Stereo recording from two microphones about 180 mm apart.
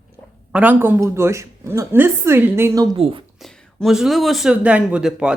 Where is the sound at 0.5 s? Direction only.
10° right (ahead or behind).